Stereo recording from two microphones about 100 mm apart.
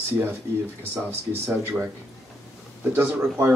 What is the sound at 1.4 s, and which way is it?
Speech, 25° right (ahead or behind).